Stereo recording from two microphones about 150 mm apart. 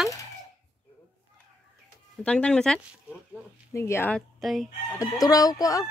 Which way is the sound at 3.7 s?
20° left (ahead or behind).